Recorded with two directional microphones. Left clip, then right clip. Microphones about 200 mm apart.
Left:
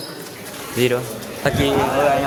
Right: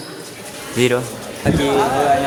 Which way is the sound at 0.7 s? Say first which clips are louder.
Right 2 dB; 10° right (ahead or behind).